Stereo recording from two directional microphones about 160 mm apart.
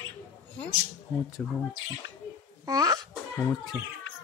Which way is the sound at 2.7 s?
20° right (ahead or behind).